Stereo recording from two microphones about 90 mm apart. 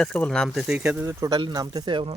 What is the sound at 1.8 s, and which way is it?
Speech, 75° right (ahead or behind).